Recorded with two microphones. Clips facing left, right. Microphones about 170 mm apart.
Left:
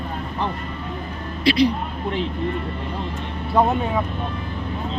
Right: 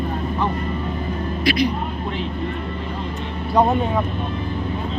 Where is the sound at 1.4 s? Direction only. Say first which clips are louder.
Left 3 dB; 30° left (ahead or behind).